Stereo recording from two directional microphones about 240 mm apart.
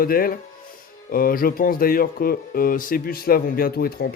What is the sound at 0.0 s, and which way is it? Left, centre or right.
Speech, left.